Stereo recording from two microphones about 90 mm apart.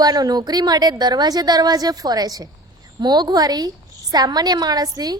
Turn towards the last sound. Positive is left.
turn(degrees=-45)  # may be behind; listen again after turning